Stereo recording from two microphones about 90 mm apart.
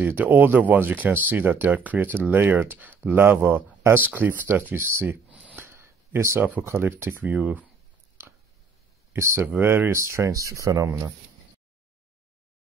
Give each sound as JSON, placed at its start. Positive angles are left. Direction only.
{"t": 0.0, "sound": "speech", "side_deg": -20}
{"t": 5.3, "sound": "a sound", "side_deg": -10}
{"t": 5.6, "sound": "speech", "side_deg": -30}
{"t": 9.1, "sound": "speech", "side_deg": -30}